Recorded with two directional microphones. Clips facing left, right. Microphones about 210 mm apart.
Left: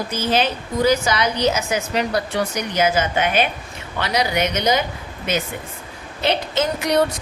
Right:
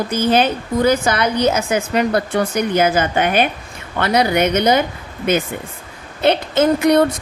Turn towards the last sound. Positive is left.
turn(degrees=-55)  # may be behind; listen again after turning